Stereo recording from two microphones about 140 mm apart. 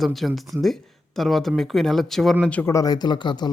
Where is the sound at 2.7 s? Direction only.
30° left (ahead or behind).